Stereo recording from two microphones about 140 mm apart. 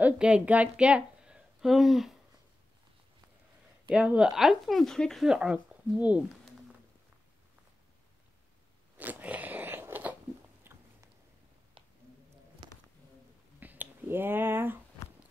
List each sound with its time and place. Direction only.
0.0 s a woman's voice: 10° right (ahead or behind)
3.9 s speech: 5° right (ahead or behind)
8.9 s biting: 10° right (ahead or behind)
12.6 s a sound: 35° right (ahead or behind)
13.6 s finger snapping: 10° right (ahead or behind)